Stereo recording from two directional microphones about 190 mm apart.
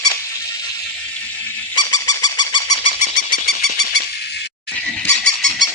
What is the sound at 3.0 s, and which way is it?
Squeak, 50° left (ahead or behind).